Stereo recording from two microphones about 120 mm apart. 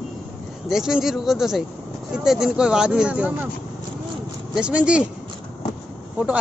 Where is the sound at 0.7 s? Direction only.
5° right (ahead or behind).